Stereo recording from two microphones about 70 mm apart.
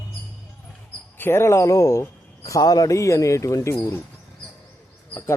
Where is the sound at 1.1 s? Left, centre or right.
Left.